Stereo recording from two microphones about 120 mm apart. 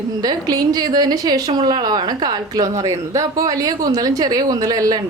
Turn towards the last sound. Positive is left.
turn(degrees=-30)  # may be behind; listen again after turning